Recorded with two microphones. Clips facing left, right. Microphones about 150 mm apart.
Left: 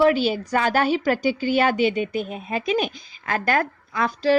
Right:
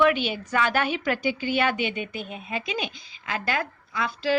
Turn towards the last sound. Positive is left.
turn(degrees=45)  # may be behind; listen again after turning